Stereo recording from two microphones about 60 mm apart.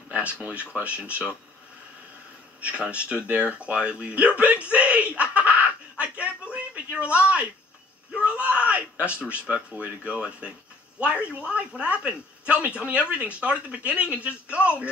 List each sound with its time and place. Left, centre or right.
0.1 s speech: right
2.6 s speech: right